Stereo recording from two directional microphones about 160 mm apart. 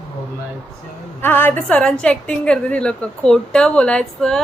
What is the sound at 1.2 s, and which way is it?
A woman's voice, 10° left (ahead or behind).